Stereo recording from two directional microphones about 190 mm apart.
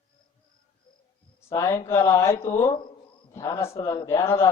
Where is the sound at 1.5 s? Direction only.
15° left (ahead or behind).